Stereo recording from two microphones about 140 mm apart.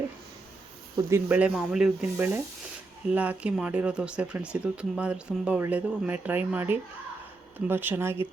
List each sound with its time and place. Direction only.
1.1 s speech: 15° right (ahead or behind)
1.5 s speech: 5° right (ahead or behind)